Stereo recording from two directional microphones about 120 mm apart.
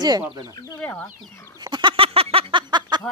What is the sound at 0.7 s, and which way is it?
Speech, 15° left (ahead or behind).